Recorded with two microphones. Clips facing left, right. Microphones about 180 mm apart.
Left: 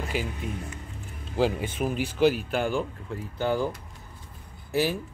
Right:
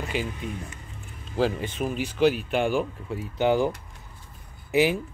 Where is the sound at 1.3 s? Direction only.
10° left (ahead or behind).